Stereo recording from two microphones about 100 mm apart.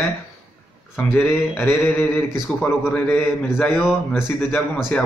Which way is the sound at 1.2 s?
20° left (ahead or behind).